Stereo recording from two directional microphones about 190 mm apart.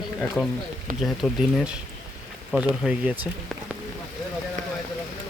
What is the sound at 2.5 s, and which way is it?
Speech, 5° right (ahead or behind).